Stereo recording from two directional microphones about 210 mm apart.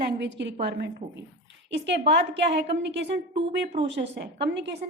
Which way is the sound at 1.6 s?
55° right (ahead or behind).